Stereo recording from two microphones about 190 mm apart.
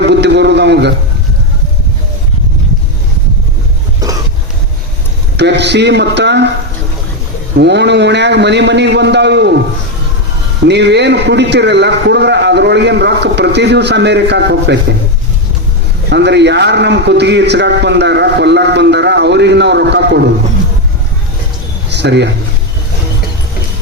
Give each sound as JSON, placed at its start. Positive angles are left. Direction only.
{"t": 0.0, "sound": "a sound", "side_deg": -65}
{"t": 5.4, "sound": "a man's voice", "side_deg": -65}
{"t": 7.6, "sound": "a man's voice", "side_deg": -65}
{"t": 10.7, "sound": "a man's voice", "side_deg": -65}
{"t": 16.0, "sound": "a man's voice", "side_deg": -65}
{"t": 21.8, "sound": "speech", "side_deg": -65}